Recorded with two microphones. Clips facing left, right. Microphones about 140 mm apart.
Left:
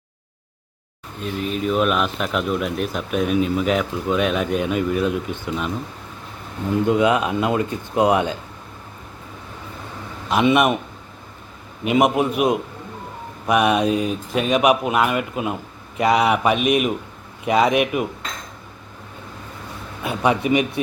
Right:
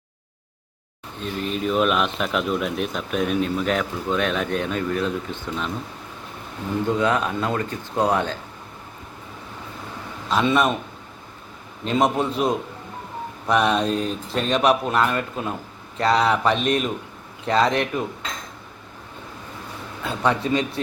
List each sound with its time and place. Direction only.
1.2 s speech: 5° left (ahead or behind)
6.8 s speech: 15° left (ahead or behind)
10.2 s speech: 15° left (ahead or behind)
11.8 s speech: 15° left (ahead or behind)
20.0 s speech: 15° left (ahead or behind)